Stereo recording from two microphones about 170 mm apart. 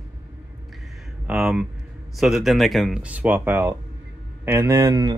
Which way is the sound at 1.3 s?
5° right (ahead or behind).